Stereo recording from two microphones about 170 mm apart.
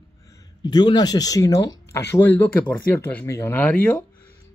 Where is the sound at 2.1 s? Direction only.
10° left (ahead or behind).